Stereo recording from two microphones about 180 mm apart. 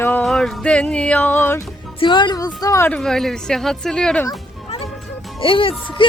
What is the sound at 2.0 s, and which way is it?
Speech, 25° left (ahead or behind).